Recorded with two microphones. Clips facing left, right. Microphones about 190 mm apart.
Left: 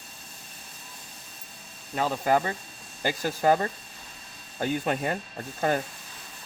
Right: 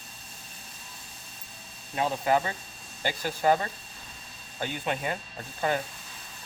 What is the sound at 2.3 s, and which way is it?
Speech, 40° left (ahead or behind).